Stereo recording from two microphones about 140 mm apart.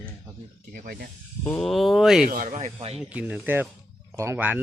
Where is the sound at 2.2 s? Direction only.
75° right (ahead or behind); by 2.7 s 55° right (ahead or behind).